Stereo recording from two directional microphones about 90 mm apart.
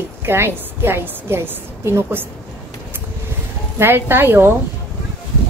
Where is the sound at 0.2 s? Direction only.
25° right (ahead or behind).